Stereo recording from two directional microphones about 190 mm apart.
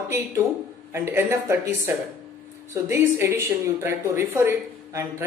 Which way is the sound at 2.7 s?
15° right (ahead or behind).